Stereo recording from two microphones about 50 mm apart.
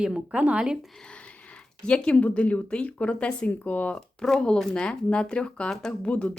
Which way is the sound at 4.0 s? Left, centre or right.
Centre.